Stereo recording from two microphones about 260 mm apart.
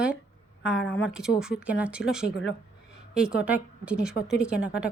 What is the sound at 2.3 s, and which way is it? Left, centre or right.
Speech, left.